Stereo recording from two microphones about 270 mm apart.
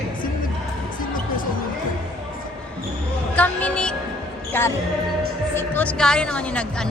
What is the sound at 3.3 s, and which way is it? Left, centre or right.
Music, centre.